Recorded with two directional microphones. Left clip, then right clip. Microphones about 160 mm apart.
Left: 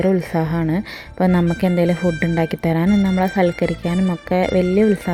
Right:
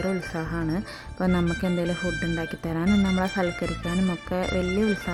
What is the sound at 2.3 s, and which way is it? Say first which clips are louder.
Speech: left 10 dB; 25° left (ahead or behind).